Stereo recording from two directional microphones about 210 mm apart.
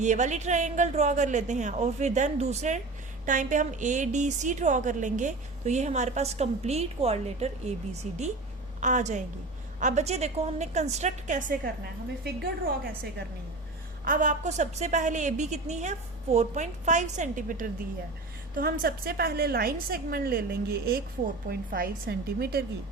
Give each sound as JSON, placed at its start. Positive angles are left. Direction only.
{"t": 0.0, "sound": "a woman's voice", "side_deg": -35}
{"t": 14.0, "sound": "a woman's voice", "side_deg": -40}